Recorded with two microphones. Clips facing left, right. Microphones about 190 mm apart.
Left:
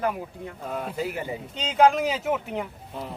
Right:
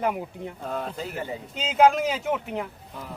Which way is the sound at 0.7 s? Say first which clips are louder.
Left 3 dB; 5° left (ahead or behind).